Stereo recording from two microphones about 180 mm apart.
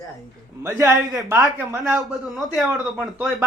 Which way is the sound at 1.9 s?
Centre (ahead or behind).